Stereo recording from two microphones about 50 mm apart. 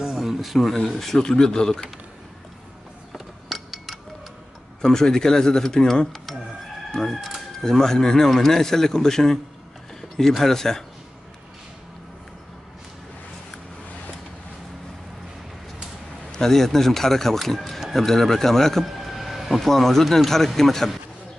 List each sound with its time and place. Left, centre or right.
0.0 s a sound: centre
0.8 s speech: centre
3.1 s a sound: centre
4.8 s speech: centre
6.9 s fowl: centre
7.6 s speech: centre
16.3 s speech: centre
18.9 s vehicle: centre
19.6 s speech: centre